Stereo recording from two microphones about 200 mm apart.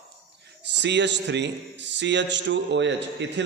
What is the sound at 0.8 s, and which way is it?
A man's voice, 60° right (ahead or behind).